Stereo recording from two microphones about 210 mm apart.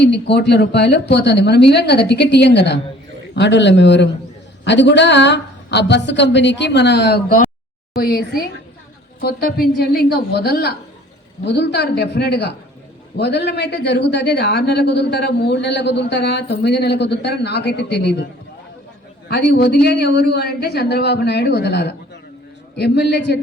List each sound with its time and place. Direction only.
0.0 s a woman's voice: 55° left (ahead or behind)
19.3 s speech: 50° left (ahead or behind)